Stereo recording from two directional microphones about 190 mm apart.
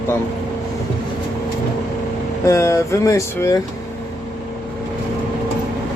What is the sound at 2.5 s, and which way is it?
Speech, 15° left (ahead or behind).